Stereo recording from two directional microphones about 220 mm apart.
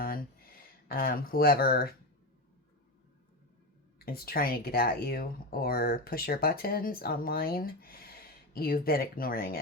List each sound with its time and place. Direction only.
0.0 s a sound: 40° left (ahead or behind)
0.9 s speech: 40° left (ahead or behind)
3.9 s speech: 45° left (ahead or behind)